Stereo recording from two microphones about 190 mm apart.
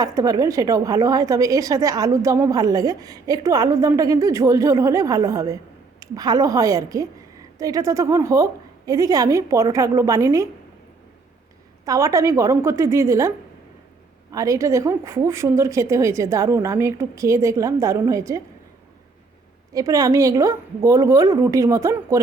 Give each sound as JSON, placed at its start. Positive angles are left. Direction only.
{"t": 0.0, "sound": "a woman's voice", "side_deg": -20}
{"t": 11.9, "sound": "a woman's voice", "side_deg": -15}
{"t": 19.7, "sound": "a woman's voice", "side_deg": -20}